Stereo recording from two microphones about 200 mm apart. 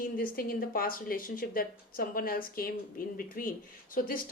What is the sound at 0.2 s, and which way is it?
A woman's voice, 45° left (ahead or behind).